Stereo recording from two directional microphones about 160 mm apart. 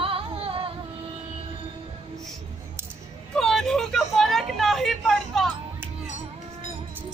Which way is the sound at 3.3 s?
5° left (ahead or behind).